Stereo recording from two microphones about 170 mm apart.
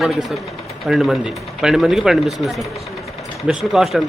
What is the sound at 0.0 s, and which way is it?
Speech, centre (ahead or behind).